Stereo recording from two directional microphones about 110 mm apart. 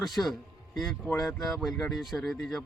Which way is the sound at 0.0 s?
Centre (ahead or behind).